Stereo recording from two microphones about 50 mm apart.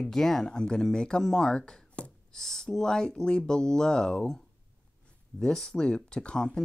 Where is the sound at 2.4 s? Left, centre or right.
Centre.